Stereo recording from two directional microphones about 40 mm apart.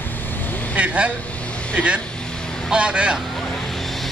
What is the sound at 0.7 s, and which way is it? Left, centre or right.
Speech, right.